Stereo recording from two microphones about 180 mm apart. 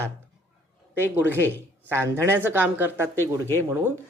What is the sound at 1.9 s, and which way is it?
Speech, 15° right (ahead or behind).